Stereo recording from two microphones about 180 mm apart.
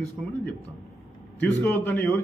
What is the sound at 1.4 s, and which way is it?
Speech, 10° left (ahead or behind).